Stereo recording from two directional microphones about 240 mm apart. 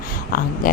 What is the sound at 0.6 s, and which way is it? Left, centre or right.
Speech, left.